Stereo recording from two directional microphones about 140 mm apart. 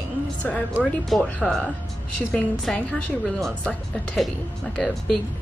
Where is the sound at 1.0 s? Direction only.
Centre (ahead or behind).